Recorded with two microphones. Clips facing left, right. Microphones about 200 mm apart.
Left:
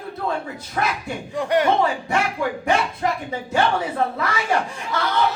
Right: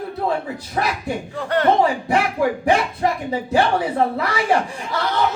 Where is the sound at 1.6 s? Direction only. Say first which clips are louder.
Right 3 dB; 35° right (ahead or behind).